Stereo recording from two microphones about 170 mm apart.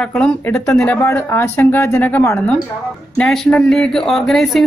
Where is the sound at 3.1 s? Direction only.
5° left (ahead or behind).